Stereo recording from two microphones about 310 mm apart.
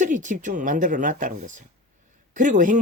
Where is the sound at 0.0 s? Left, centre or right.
Right.